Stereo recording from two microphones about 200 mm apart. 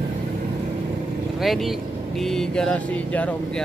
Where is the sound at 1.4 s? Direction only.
Centre (ahead or behind).